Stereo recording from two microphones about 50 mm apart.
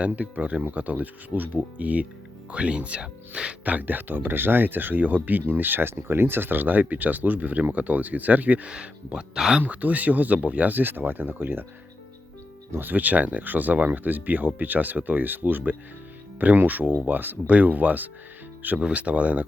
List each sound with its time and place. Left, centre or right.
0.0 s speech: right
3.6 s speech: right
8.7 s speech: right
12.8 s speech: right